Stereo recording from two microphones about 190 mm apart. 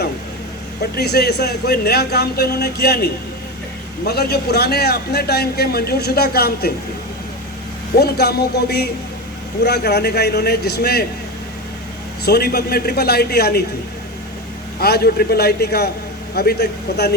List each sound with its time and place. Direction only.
0.8 s a man's voice: 60° left (ahead or behind)
7.9 s a man's voice: 55° left (ahead or behind)
12.2 s a man's voice: 55° left (ahead or behind)
14.8 s a man's voice: 55° left (ahead or behind)